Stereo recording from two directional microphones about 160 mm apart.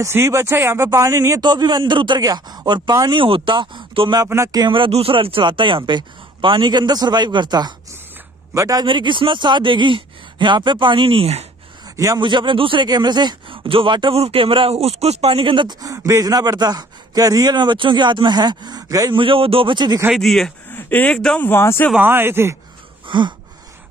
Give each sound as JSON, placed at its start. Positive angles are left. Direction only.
{"t": 0.0, "sound": "speech", "side_deg": -15}
{"t": 4.2, "sound": "speech", "side_deg": -20}
{"t": 8.8, "sound": "speech", "side_deg": -30}
{"t": 12.0, "sound": "speech", "side_deg": -25}
{"t": 20.2, "sound": "speech", "side_deg": 0}
{"t": 21.9, "sound": "speech", "side_deg": -15}
{"t": 23.0, "sound": "a sound", "side_deg": -30}